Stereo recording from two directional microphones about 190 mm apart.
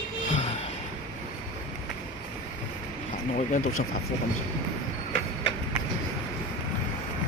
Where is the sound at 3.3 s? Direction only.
40° left (ahead or behind).